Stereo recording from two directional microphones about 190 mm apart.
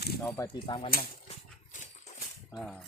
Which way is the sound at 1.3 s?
40° left (ahead or behind).